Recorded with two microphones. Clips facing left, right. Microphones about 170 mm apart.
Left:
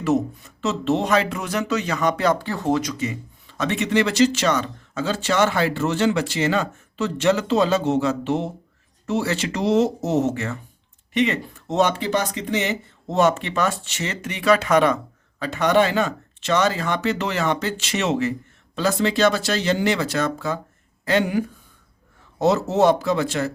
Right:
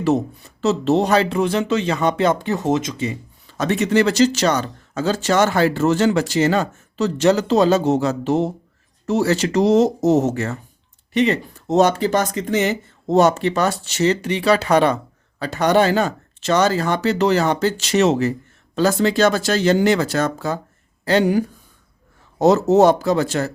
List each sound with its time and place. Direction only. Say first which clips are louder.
0.0 s speech: right 2 dB; 35° right (ahead or behind)